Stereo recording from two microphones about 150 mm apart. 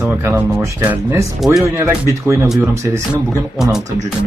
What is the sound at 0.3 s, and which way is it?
Speech, 15° right (ahead or behind).